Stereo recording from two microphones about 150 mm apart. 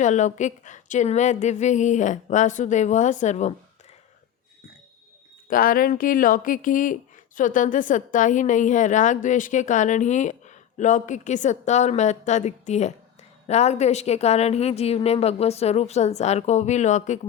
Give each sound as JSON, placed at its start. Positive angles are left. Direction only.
{"t": 0.0, "sound": "speech", "side_deg": 55}
{"t": 5.5, "sound": "a woman's voice", "side_deg": 70}